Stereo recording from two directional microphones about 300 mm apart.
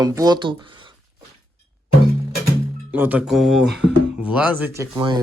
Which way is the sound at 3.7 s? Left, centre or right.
Right.